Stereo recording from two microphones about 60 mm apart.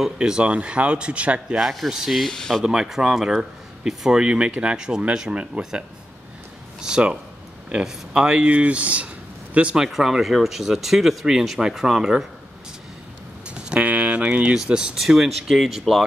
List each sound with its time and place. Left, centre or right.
0.0 s speech: centre
1.6 s speech: centre
2.6 s speech: centre
9.8 s speech: centre
13.7 s speech: centre